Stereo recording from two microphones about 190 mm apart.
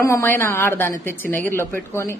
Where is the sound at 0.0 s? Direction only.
15° left (ahead or behind).